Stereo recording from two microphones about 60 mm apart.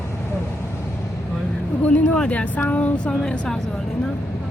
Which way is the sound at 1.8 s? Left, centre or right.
Left.